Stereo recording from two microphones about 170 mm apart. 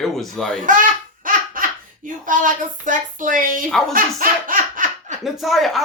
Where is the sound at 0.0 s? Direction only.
5° left (ahead or behind).